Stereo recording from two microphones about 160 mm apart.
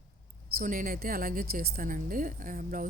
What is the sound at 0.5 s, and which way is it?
A woman's voice, 55° right (ahead or behind).